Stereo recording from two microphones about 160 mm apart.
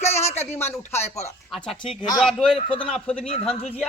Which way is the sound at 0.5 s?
15° left (ahead or behind).